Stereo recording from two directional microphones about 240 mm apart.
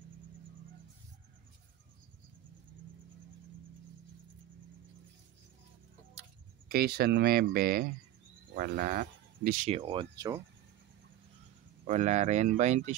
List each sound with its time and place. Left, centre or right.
6.7 s speech: right
9.8 s speech: right
11.8 s speech: right